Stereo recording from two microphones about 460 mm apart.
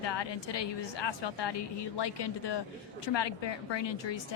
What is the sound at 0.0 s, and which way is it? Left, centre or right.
A woman's voice, left.